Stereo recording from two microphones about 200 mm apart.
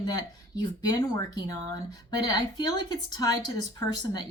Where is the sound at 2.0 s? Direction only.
20° left (ahead or behind).